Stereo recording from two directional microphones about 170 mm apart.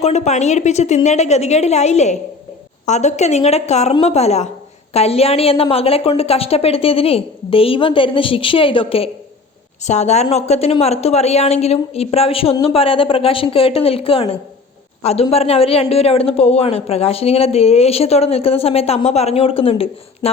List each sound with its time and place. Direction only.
0.0 s speech: 40° left (ahead or behind)